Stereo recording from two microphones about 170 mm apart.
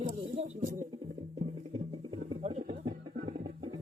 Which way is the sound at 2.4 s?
40° right (ahead or behind).